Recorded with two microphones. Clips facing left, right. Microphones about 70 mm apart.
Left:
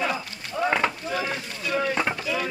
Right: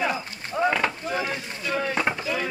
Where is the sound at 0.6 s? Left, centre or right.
Centre.